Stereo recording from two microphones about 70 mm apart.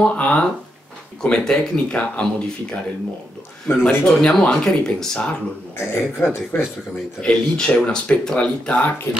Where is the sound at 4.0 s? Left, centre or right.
Centre.